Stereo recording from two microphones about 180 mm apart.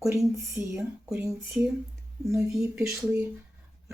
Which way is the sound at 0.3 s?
15° right (ahead or behind).